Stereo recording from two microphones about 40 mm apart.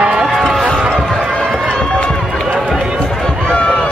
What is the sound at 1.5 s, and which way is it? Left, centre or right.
Run, centre.